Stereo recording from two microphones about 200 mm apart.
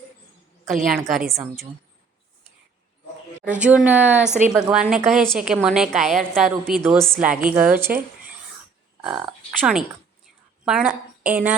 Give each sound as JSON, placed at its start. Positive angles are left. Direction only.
{"t": 0.9, "sound": "a woman's voice", "side_deg": 0}
{"t": 3.4, "sound": "a woman's voice", "side_deg": -5}